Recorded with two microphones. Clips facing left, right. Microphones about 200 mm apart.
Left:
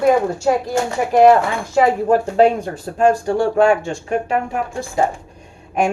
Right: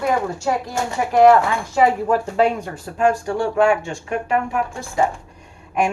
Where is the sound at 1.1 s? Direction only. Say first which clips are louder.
Left 1 dB; 25° left (ahead or behind).